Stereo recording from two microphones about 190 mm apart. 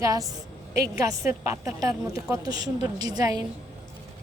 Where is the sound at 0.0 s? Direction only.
20° right (ahead or behind).